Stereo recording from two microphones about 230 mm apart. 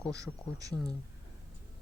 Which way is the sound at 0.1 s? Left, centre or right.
Centre.